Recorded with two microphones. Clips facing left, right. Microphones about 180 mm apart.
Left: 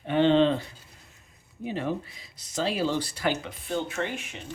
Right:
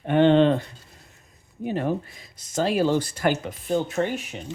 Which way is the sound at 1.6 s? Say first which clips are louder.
Right 4 dB; 50° right (ahead or behind).